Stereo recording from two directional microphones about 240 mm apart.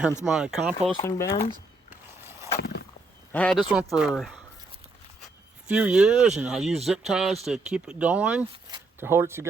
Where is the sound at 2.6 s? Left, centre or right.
Left.